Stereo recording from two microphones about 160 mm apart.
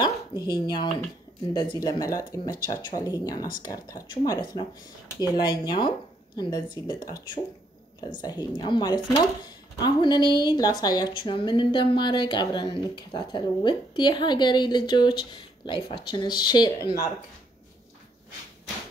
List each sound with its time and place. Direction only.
0.0 s a woman's voice: 25° left (ahead or behind)